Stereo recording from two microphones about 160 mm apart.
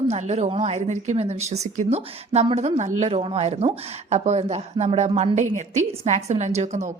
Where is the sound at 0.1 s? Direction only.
45° right (ahead or behind).